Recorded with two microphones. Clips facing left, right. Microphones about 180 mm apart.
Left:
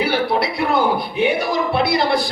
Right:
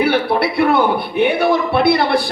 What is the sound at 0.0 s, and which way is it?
A man's voice, 60° right (ahead or behind).